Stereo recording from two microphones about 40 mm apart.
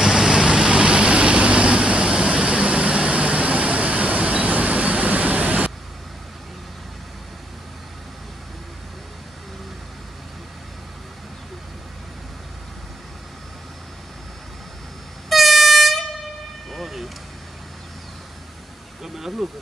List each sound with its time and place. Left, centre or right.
0.0 s vehicle: centre; by 5.7 s right
15.2 s air horn: centre
16.7 s vehicle: centre
19.0 s a sound: centre